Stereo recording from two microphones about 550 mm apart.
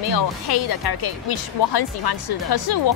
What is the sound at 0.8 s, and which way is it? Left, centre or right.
Speech, left.